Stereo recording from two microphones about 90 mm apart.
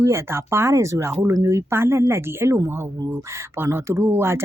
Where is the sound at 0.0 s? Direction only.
30° right (ahead or behind).